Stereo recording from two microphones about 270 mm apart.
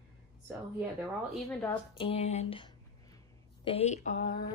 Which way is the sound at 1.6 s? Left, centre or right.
Centre.